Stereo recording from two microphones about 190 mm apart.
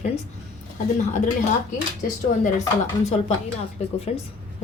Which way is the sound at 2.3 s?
40° left (ahead or behind).